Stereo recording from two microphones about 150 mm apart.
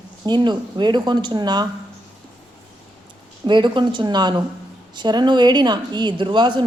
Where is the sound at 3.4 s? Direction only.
30° right (ahead or behind).